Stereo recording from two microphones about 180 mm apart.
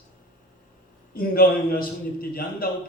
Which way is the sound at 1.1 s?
55° left (ahead or behind).